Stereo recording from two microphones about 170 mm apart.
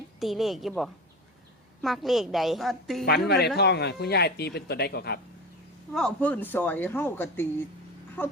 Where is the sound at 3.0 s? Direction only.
70° left (ahead or behind).